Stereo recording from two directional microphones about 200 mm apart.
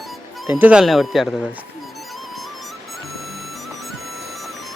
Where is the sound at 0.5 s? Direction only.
5° right (ahead or behind).